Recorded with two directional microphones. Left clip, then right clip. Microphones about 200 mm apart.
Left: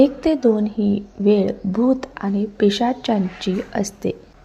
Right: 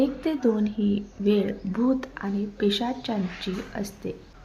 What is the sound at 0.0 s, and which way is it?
Speech, 30° left (ahead or behind).